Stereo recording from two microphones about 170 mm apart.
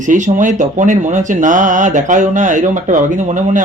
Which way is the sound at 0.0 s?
45° right (ahead or behind).